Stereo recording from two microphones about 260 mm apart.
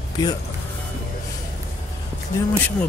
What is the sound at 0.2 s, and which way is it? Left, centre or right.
Speech, centre.